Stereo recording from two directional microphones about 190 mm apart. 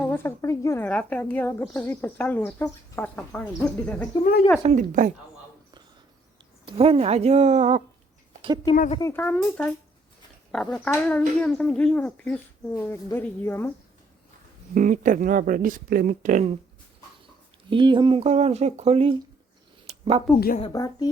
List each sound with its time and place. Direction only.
0.0 s a woman's voice: 10° left (ahead or behind)
4.2 s speech: 55° left (ahead or behind)
4.6 s speech: 40° right (ahead or behind)
6.7 s speech: 30° right (ahead or behind)
9.0 s a woman's voice: 15° left (ahead or behind)
14.8 s speech: 45° right (ahead or behind)
17.7 s speech: 25° right (ahead or behind)
19.9 s a sound: 30° right (ahead or behind)
20.7 s speech: 20° left (ahead or behind)